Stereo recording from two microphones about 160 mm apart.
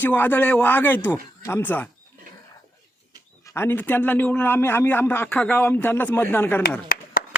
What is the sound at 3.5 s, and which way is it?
A man's voice, 15° left (ahead or behind).